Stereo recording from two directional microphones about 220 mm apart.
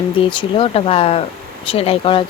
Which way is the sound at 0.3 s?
25° left (ahead or behind).